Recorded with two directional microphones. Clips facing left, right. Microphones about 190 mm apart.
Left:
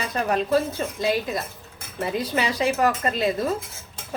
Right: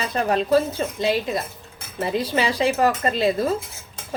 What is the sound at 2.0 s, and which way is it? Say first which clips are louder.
Speech: right 2 dB; 30° right (ahead or behind).